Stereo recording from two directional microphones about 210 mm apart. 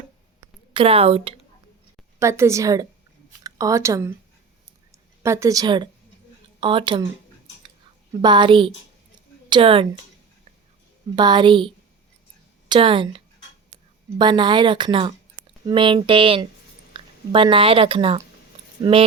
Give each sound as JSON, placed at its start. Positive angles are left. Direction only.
{"t": 0.7, "sound": "speech", "side_deg": -25}
{"t": 2.1, "sound": "speech", "side_deg": -15}
{"t": 5.2, "sound": "speech", "side_deg": -15}
{"t": 8.2, "sound": "speech", "side_deg": -20}
{"t": 11.1, "sound": "a woman's voice", "side_deg": -20}